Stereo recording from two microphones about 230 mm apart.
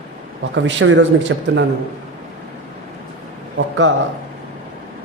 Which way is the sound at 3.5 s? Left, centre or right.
Right.